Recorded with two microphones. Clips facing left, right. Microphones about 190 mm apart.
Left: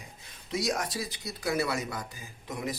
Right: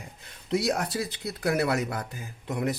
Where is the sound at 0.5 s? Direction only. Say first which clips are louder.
Right 4 dB; 60° right (ahead or behind).